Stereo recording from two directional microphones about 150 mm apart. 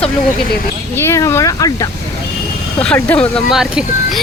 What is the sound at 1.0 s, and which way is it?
Speech, 20° left (ahead or behind).